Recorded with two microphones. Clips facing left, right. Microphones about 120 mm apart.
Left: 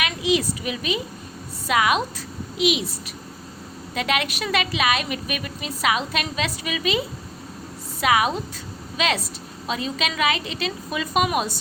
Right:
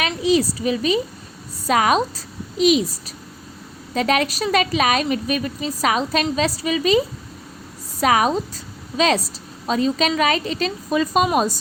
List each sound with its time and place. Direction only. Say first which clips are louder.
0.0 s a sound: right 4 dB; 35° right (ahead or behind)
1.6 s a woman's voice: right 3 dB; 40° right (ahead or behind)
8.0 s a woman's voice: right 3 dB; 40° right (ahead or behind)